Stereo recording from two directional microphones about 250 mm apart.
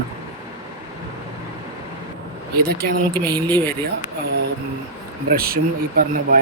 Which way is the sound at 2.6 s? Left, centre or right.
Right.